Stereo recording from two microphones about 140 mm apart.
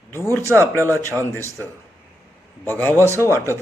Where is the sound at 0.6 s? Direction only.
20° right (ahead or behind).